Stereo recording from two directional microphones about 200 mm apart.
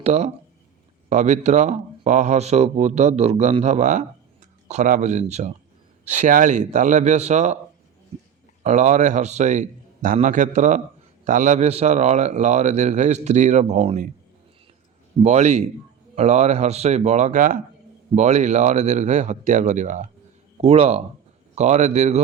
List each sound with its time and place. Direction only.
0.0 s speech: 35° right (ahead or behind)
8.6 s speech: 35° right (ahead or behind)
15.2 s speech: 35° right (ahead or behind)